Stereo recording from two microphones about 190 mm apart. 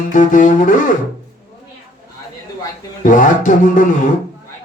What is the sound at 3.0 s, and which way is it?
Speech, 45° left (ahead or behind).